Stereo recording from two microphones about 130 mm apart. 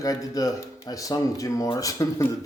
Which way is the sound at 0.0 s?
25° left (ahead or behind).